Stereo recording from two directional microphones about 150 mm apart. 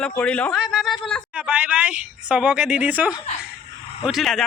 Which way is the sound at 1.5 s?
10° right (ahead or behind).